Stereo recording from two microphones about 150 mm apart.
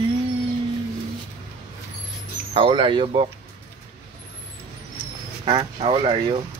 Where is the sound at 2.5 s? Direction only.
35° right (ahead or behind).